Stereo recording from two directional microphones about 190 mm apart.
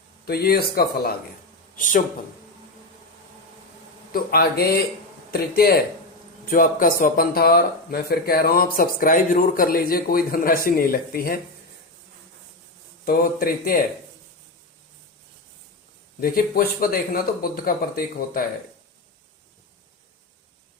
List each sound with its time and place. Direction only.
0.3 s speech: 55° left (ahead or behind)
1.7 s speech: 45° left (ahead or behind)
4.1 s speech: 55° left (ahead or behind)
13.1 s speech: 50° left (ahead or behind)
16.2 s speech: 50° left (ahead or behind)